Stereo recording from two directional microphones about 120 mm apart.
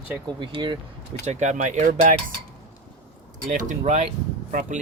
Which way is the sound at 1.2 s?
75° right (ahead or behind).